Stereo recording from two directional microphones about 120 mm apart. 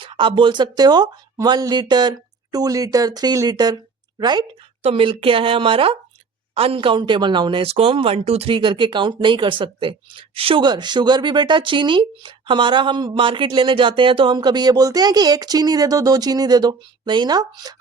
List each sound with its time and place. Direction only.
0.0 s speech: 45° right (ahead or behind)
4.8 s speech: 55° right (ahead or behind); by 17.7 s 35° right (ahead or behind)